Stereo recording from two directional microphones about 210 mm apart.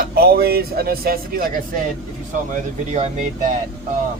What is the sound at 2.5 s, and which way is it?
Speech, 35° right (ahead or behind).